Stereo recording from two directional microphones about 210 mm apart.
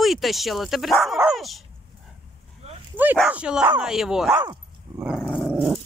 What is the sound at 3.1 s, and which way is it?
Speech, 5° right (ahead or behind).